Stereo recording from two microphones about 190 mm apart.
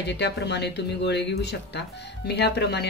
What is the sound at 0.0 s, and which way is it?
Speech, 65° left (ahead or behind).